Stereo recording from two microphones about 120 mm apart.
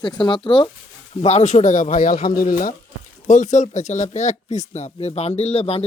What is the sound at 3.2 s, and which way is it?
Speech, 90° left.